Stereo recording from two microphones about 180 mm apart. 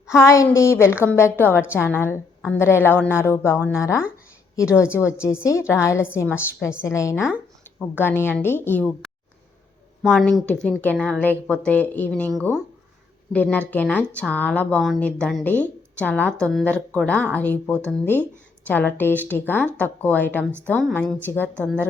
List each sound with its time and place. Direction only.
0.1 s a woman's voice: 15° left (ahead or behind)
10.0 s a woman's voice: centre (ahead or behind)
13.3 s a woman's voice: 5° left (ahead or behind)